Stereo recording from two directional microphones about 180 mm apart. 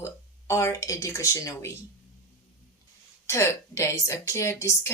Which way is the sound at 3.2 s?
15° left (ahead or behind).